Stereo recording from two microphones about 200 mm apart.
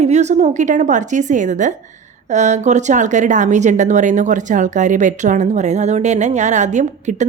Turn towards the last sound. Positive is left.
turn(degrees=-35)  # may be behind; listen again after turning